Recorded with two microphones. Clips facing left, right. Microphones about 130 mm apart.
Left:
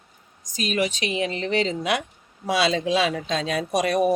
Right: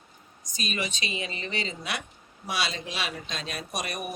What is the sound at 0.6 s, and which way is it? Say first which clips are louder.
Speech: left 8 dB; 90° left.